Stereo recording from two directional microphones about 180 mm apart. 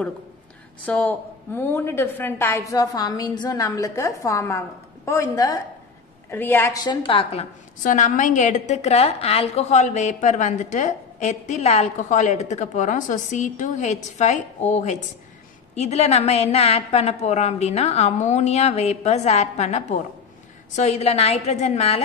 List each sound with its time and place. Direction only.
0.8 s a woman's voice: 10° left (ahead or behind); by 7.4 s 30° left (ahead or behind)
7.8 s a woman's voice: 45° left (ahead or behind)